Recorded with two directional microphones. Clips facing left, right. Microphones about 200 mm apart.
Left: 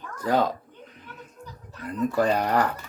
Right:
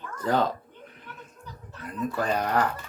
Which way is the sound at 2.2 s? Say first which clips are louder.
Left 2 dB; 35° left (ahead or behind).